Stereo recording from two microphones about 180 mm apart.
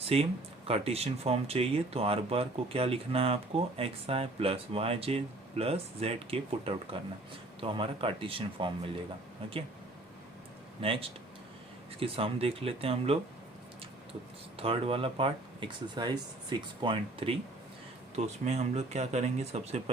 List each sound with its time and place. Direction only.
0.0 s speech: 35° right (ahead or behind)
10.8 s speech: 30° right (ahead or behind)
14.6 s speech: 30° right (ahead or behind)
18.4 s speech: 40° right (ahead or behind)